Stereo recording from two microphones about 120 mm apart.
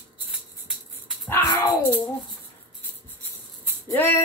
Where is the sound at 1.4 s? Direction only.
35° left (ahead or behind).